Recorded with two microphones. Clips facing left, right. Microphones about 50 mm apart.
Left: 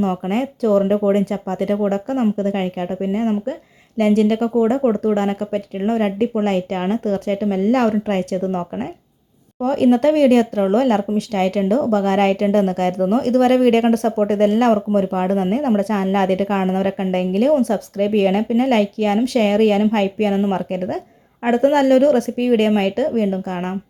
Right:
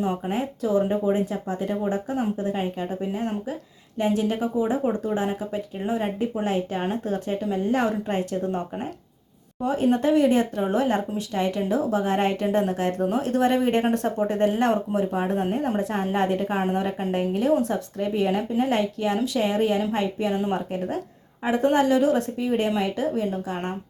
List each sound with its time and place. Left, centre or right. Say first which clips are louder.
0.0 s a woman's voice: left 6 dB; left
3.0 s speech: left 9 dB; left
3.9 s a woman's voice: left 8 dB; left
9.6 s a woman's voice: left 7 dB; left
16.6 s a woman's voice: left 6 dB; left
21.4 s a woman's voice: left 6 dB; left